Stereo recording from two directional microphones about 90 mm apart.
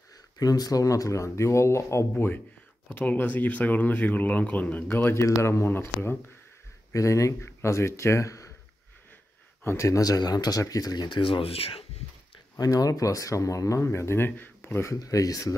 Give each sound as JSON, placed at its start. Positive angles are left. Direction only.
{"t": 0.4, "sound": "speech", "side_deg": 45}
{"t": 6.9, "sound": "speech", "side_deg": 35}
{"t": 9.6, "sound": "speech", "side_deg": 30}
{"t": 12.5, "sound": "speech", "side_deg": 45}